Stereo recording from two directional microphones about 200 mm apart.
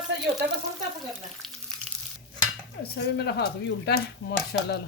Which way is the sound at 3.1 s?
55° left (ahead or behind).